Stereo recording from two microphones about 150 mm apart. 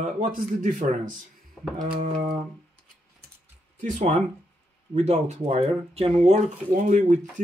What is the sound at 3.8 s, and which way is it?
Speech, 55° right (ahead or behind).